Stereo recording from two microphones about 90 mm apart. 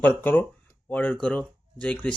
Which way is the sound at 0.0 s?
20° left (ahead or behind).